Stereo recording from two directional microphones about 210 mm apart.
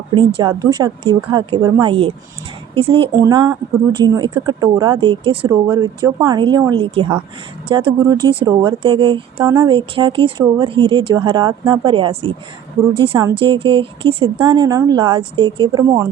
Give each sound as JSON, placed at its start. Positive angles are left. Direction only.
{"t": 0.1, "sound": "speech", "side_deg": -25}
{"t": 5.4, "sound": "speech", "side_deg": -10}
{"t": 5.7, "sound": "speech", "side_deg": -20}